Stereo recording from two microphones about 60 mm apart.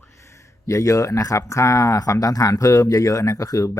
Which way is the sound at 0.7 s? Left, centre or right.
Left.